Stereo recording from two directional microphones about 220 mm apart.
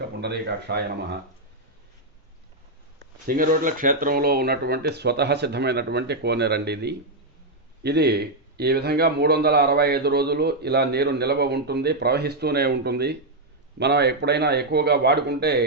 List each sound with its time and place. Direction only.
0.2 s a man's voice: 50° right (ahead or behind)
3.2 s a man's voice: 40° right (ahead or behind)